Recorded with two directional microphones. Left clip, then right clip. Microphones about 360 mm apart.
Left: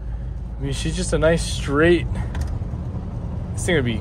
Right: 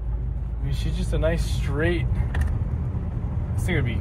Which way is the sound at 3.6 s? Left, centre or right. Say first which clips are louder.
Left 8 dB; left.